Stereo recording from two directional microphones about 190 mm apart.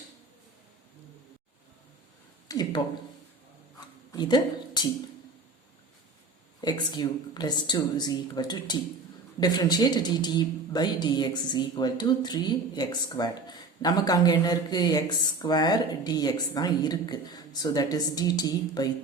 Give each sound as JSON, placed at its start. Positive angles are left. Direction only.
{"t": 2.5, "sound": "speech", "side_deg": 20}
{"t": 4.1, "sound": "speech", "side_deg": 20}
{"t": 6.6, "sound": "speech", "side_deg": 25}